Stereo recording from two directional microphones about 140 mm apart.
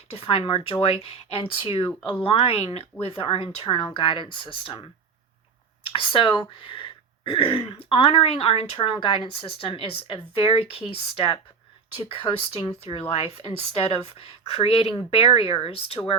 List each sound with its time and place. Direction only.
0.1 s speech: 40° left (ahead or behind)
5.8 s a sound: 40° left (ahead or behind)
6.5 s speech: 35° left (ahead or behind)